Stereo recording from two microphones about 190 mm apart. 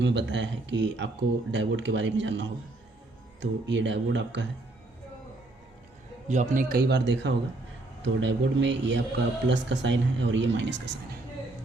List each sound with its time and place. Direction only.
0.0 s speech: 70° right (ahead or behind)
6.2 s a man's voice: 40° right (ahead or behind); by 10.8 s 70° right (ahead or behind)